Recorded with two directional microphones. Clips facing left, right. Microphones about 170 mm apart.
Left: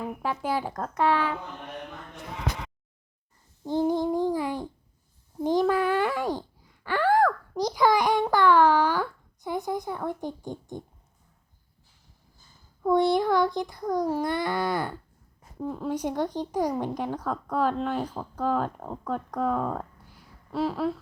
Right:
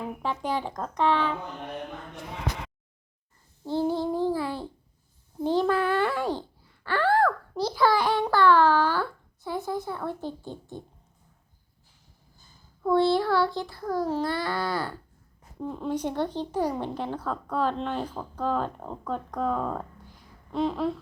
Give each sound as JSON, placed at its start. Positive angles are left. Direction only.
{"t": 0.2, "sound": "speech", "side_deg": 10}
{"t": 3.7, "sound": "a child's voice", "side_deg": 15}
{"t": 12.8, "sound": "speech", "side_deg": 15}
{"t": 15.6, "sound": "speech", "side_deg": 5}